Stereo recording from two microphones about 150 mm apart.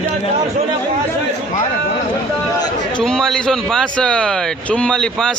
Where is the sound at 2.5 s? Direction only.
25° left (ahead or behind).